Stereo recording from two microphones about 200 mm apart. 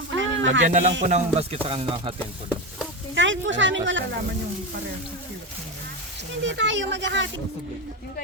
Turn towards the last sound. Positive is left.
turn(degrees=-65)  # may be behind; listen again after turning